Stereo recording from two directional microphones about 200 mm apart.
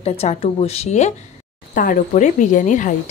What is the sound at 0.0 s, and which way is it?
Speech, 30° left (ahead or behind).